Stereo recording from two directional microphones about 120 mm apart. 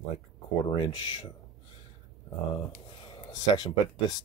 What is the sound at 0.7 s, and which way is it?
Speech, 40° left (ahead or behind).